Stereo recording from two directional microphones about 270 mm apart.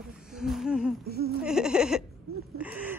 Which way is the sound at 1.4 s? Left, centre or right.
Centre.